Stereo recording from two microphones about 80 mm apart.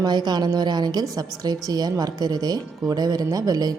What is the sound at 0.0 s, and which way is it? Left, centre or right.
Speech, right.